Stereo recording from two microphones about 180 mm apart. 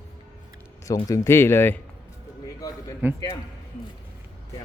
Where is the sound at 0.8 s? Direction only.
20° left (ahead or behind).